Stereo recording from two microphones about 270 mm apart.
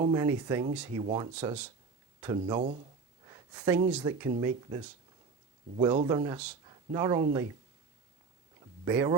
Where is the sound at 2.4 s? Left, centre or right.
Centre.